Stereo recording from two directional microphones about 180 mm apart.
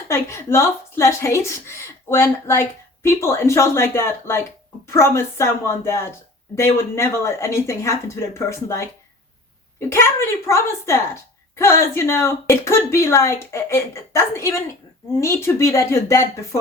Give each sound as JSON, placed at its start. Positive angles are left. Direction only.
{"t": 0.1, "sound": "a woman's voice", "side_deg": 15}
{"t": 9.9, "sound": "a woman's voice", "side_deg": 15}